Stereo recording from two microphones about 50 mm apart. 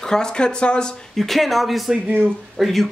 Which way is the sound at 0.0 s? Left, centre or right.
Centre.